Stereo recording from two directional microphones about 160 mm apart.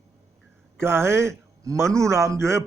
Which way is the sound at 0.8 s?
15° right (ahead or behind).